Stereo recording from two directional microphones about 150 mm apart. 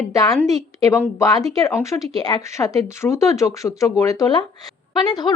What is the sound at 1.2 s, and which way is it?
Speech, 25° left (ahead or behind).